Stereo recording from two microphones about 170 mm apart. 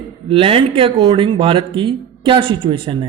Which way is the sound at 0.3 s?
30° right (ahead or behind).